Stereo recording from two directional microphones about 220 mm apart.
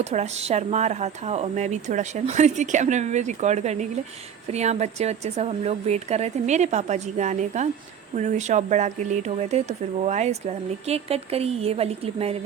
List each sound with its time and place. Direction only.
0.0 s speech: 30° right (ahead or behind)